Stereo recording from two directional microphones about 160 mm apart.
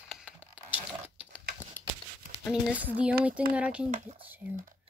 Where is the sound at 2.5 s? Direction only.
10° right (ahead or behind).